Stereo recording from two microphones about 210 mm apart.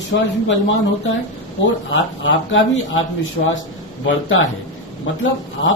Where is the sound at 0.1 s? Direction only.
50° left (ahead or behind).